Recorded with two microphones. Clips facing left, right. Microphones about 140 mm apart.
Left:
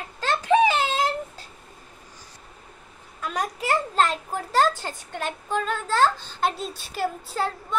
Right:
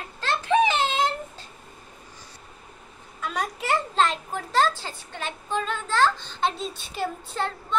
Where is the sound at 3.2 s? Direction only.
5° left (ahead or behind).